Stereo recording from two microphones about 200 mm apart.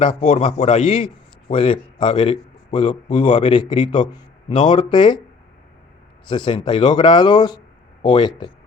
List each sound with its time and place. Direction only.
0.0 s a man's voice: 30° left (ahead or behind)
6.2 s a man's voice: 25° left (ahead or behind)